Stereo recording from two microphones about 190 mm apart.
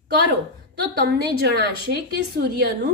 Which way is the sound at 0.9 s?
55° right (ahead or behind).